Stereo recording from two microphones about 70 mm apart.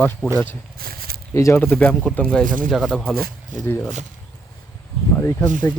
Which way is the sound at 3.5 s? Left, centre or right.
Left.